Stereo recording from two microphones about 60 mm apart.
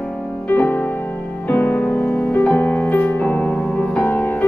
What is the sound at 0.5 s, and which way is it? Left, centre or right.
Music, left.